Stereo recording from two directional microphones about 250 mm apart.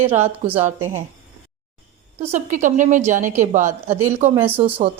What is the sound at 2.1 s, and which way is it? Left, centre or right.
A woman's voice, right.